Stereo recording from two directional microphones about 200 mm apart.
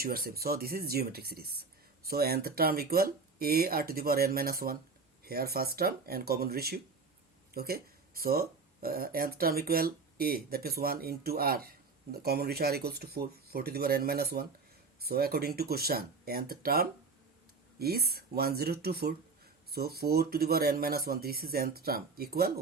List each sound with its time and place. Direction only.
0.0 s speech: 50° right (ahead or behind)